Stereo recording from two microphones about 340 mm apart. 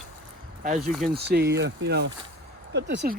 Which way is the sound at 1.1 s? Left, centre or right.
Right.